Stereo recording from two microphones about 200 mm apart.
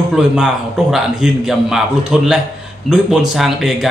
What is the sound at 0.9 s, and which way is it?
Speech, centre (ahead or behind).